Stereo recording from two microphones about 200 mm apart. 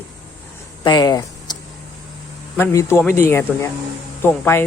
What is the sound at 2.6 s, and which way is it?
Speech, 15° left (ahead or behind).